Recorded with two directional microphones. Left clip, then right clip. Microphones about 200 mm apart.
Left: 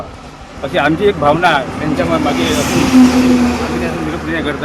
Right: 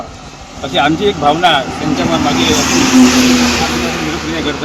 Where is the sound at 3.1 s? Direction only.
45° left (ahead or behind).